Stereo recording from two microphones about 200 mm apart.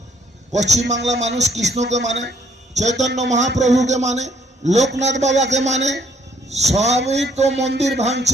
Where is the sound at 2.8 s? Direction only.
35° right (ahead or behind).